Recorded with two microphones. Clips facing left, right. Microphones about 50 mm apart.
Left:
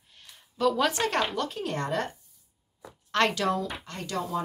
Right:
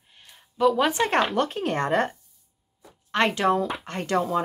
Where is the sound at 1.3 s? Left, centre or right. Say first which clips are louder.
Right 6 dB; right.